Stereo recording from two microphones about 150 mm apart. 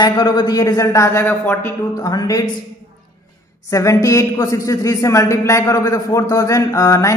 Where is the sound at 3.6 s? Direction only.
20° left (ahead or behind).